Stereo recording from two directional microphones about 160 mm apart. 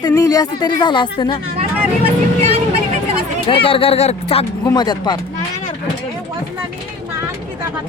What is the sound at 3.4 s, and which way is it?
Speech, 35° left (ahead or behind).